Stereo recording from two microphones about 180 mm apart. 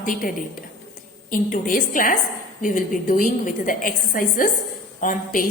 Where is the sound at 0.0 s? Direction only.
50° left (ahead or behind).